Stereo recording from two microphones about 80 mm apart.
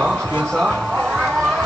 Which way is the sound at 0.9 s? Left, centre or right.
Centre.